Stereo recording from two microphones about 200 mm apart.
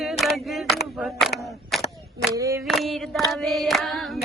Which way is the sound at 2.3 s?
15° right (ahead or behind).